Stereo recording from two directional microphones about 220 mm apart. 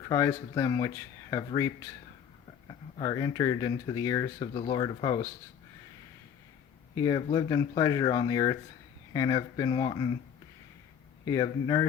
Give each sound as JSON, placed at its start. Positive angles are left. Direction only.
{"t": 0.1, "sound": "speech", "side_deg": 15}
{"t": 6.9, "sound": "speech", "side_deg": 15}
{"t": 11.3, "sound": "speech", "side_deg": 15}